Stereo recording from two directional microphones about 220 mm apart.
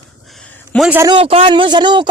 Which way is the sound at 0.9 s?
15° right (ahead or behind).